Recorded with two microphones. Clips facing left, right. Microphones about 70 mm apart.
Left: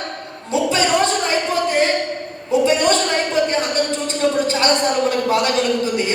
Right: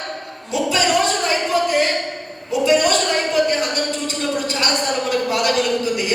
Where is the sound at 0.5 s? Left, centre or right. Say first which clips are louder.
Left 2 dB; left.